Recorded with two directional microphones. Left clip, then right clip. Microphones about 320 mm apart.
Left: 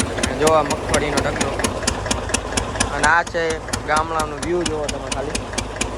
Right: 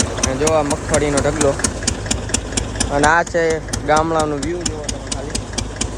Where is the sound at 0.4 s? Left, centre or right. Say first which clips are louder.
Left 1 dB; centre.